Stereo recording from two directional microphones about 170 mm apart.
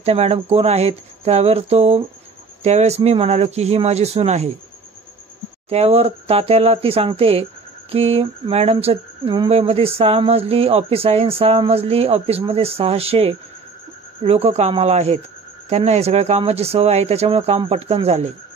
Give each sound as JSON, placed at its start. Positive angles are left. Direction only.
{"t": 0.0, "sound": "speech", "side_deg": -35}
{"t": 5.7, "sound": "speech", "side_deg": -35}